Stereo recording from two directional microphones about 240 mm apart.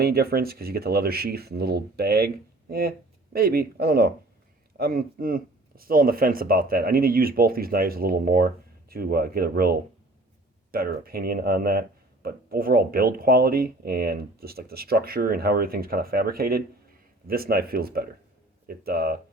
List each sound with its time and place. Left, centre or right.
0.0 s speech: right